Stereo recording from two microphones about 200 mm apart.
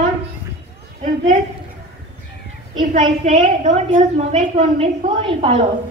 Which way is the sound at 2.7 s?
35° right (ahead or behind).